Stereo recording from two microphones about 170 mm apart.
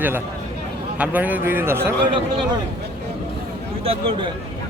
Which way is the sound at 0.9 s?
10° right (ahead or behind).